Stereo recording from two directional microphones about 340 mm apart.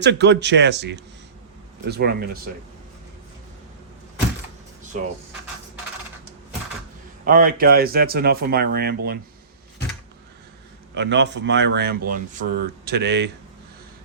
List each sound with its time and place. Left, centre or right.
0.0 s speech: right
7.3 s speech: right
10.9 s speech: right